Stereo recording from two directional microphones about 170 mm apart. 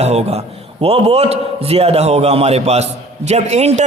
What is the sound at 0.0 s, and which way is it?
A man's voice, 40° right (ahead or behind).